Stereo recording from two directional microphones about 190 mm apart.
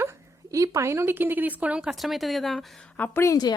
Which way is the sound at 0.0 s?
15° right (ahead or behind).